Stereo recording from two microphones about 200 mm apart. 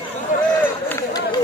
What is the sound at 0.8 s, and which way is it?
Run, 15° left (ahead or behind).